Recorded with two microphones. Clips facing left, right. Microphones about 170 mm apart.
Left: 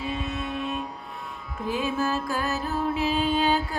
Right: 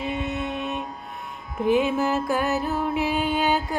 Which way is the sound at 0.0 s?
20° right (ahead or behind).